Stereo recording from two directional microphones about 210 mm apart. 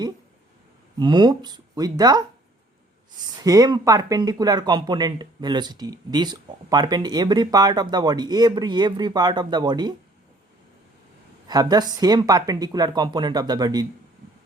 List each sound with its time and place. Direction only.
0.9 s speech: 20° right (ahead or behind)
3.4 s speech: 20° right (ahead or behind)
11.4 s speech: 20° right (ahead or behind)